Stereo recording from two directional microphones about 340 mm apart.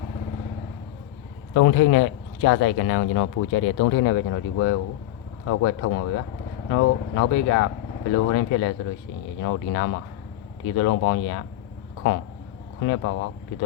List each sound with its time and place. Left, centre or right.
1.5 s speech: left
12.8 s speech: left